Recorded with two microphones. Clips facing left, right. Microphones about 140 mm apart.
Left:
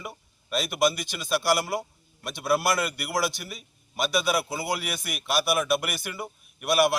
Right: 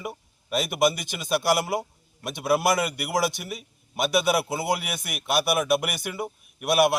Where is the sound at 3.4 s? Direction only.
Centre (ahead or behind).